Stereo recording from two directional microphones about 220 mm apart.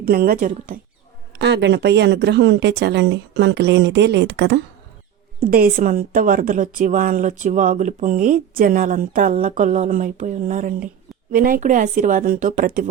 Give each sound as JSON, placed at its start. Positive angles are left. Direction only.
{"t": 0.0, "sound": "a woman's voice", "side_deg": -45}
{"t": 1.4, "sound": "speech", "side_deg": -50}
{"t": 5.4, "sound": "a woman's voice", "side_deg": -40}